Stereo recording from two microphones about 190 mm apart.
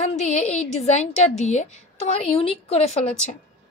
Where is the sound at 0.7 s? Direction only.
35° left (ahead or behind).